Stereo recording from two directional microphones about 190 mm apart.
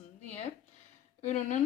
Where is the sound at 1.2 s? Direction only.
40° left (ahead or behind).